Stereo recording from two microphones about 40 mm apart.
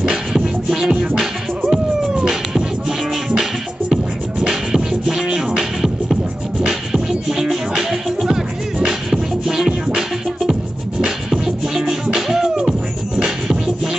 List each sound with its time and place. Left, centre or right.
0.0 s music: centre
1.7 s cat: centre
3.9 s music: centre